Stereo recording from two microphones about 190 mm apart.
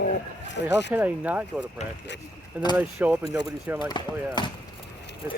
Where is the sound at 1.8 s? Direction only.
35° left (ahead or behind).